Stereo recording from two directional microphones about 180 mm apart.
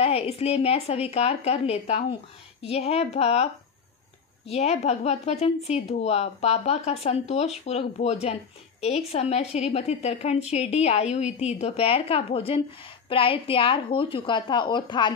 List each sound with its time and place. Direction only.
0.0 s a woman's voice: 35° left (ahead or behind)
4.5 s a woman's voice: 35° left (ahead or behind)